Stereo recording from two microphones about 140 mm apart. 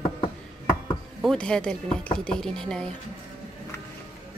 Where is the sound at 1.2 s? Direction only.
5° left (ahead or behind).